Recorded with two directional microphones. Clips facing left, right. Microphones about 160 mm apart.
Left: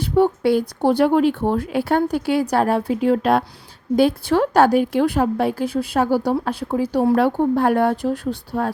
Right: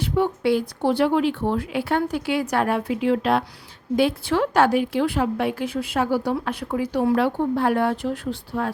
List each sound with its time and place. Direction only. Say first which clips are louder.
0.0 s a woman's voice: left 5 dB; 40° left (ahead or behind)